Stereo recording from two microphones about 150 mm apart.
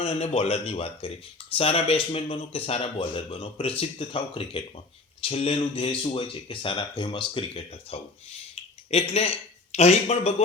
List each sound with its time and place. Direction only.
0.0 s speech: 45° left (ahead or behind)